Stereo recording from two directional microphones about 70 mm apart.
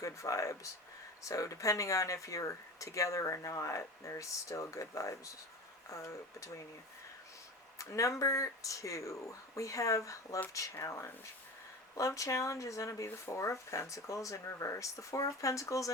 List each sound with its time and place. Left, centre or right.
0.0 s speech: left
7.8 s speech: left